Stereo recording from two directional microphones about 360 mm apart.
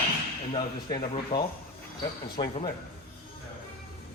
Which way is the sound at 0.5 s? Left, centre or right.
Centre.